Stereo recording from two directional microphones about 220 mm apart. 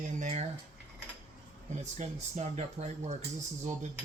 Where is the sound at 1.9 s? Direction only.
30° right (ahead or behind).